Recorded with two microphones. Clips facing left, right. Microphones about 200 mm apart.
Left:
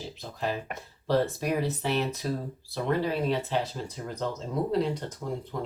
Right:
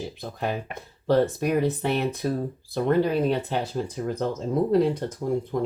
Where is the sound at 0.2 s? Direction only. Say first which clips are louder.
Right 1 dB; 55° right (ahead or behind).